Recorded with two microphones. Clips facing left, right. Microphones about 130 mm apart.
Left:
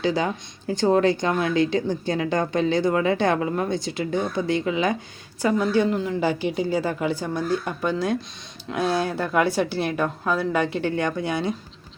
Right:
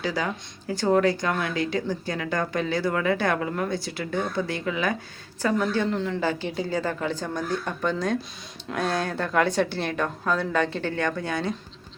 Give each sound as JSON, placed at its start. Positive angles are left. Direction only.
{"t": 0.0, "sound": "a woman's voice", "side_deg": 25}